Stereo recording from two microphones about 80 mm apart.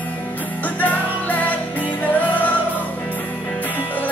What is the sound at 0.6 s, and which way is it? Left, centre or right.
Music, left.